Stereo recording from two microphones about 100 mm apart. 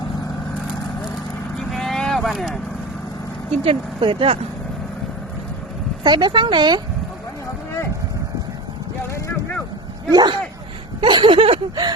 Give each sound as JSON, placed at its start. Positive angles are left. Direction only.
{"t": 1.5, "sound": "vehicle", "side_deg": 0}
{"t": 3.5, "sound": "speech", "side_deg": -70}
{"t": 6.0, "sound": "speech", "side_deg": -50}
{"t": 10.1, "sound": "speech", "side_deg": -45}
{"t": 11.0, "sound": "a sound", "side_deg": -50}